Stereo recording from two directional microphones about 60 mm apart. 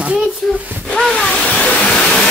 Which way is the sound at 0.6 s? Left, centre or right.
Right.